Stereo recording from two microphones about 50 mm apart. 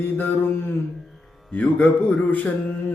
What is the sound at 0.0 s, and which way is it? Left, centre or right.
Music, left.